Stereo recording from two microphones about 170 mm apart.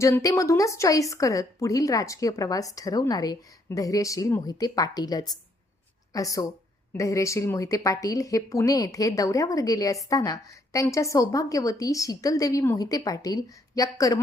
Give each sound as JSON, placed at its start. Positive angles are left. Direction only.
{"t": 0.0, "sound": "speech", "side_deg": 20}